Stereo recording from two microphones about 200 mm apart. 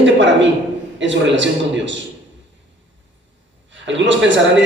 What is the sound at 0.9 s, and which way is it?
Speech, 65° right (ahead or behind).